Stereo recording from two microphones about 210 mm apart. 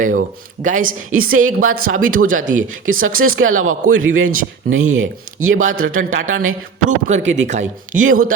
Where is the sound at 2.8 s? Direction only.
75° right (ahead or behind).